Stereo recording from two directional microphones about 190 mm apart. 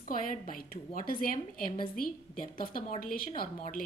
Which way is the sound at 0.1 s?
45° left (ahead or behind).